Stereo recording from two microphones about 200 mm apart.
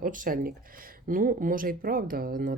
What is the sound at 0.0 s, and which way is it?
Speech, 40° right (ahead or behind).